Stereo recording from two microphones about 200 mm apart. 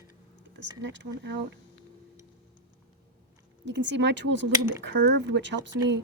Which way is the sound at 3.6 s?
65° right (ahead or behind).